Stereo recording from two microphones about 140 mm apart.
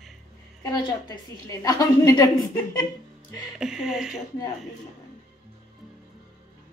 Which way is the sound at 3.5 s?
5° right (ahead or behind).